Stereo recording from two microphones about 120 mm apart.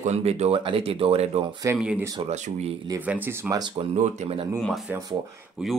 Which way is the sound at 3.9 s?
65° right (ahead or behind).